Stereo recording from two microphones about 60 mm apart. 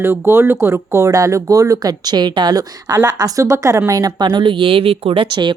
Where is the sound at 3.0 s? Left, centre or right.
Right.